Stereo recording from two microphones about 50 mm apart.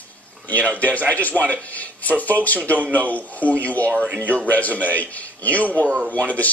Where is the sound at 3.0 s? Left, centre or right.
Left.